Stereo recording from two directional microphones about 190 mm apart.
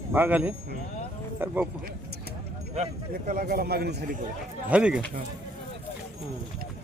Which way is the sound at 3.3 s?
50° right (ahead or behind).